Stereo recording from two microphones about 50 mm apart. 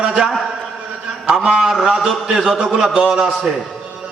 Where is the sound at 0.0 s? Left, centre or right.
Centre.